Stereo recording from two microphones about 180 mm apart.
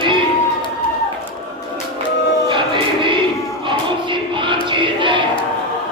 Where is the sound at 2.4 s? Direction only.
25° right (ahead or behind).